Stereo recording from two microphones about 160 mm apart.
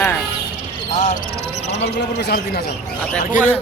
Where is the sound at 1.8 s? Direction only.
90° left.